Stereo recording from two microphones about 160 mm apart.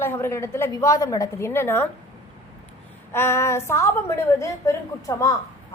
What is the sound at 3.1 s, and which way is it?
A woman's voice, 15° left (ahead or behind).